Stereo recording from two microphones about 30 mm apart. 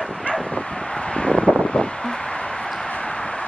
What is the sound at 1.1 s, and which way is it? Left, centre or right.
Vehicle, left.